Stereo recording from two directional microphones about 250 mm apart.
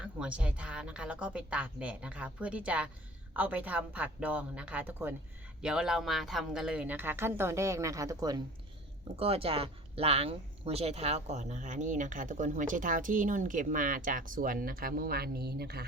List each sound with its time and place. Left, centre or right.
0.0 s a woman's voice: centre; by 15.9 s right